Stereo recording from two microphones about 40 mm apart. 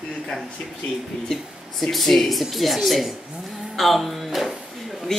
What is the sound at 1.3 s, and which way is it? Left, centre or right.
Speech, centre.